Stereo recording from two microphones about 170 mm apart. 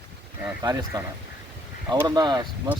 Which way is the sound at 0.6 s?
20° right (ahead or behind).